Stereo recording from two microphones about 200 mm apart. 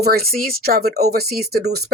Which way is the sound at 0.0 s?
50° right (ahead or behind).